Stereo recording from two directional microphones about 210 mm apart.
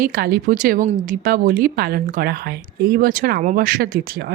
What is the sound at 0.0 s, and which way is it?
Speech, 45° right (ahead or behind).